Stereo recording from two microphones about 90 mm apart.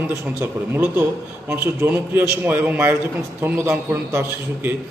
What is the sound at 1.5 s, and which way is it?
A man's voice, 20° right (ahead or behind).